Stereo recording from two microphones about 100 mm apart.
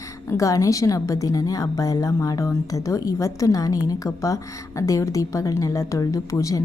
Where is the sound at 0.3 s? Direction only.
35° left (ahead or behind).